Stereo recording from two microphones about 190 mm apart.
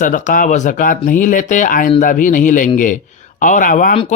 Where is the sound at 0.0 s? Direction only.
45° left (ahead or behind).